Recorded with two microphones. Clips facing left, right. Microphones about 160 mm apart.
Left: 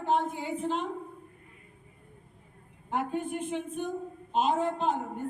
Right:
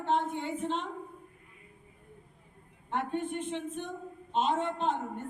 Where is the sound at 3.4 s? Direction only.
5° left (ahead or behind).